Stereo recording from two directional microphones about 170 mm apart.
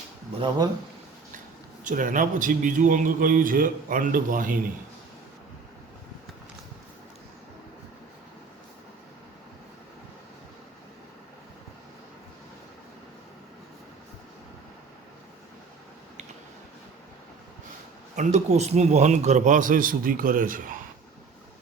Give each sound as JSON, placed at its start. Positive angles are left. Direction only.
{"t": 0.3, "sound": "speech", "side_deg": -25}
{"t": 1.8, "sound": "a man's voice", "side_deg": -50}
{"t": 18.2, "sound": "a man's voice", "side_deg": -40}